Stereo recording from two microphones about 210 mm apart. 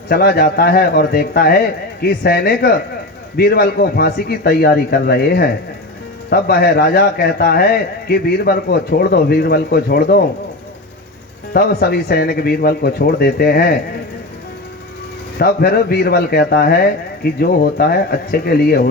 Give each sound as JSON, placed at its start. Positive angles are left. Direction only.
{"t": 0.1, "sound": "a man's voice", "side_deg": 45}
{"t": 11.5, "sound": "a man's voice", "side_deg": 45}
{"t": 15.4, "sound": "a man's voice", "side_deg": 45}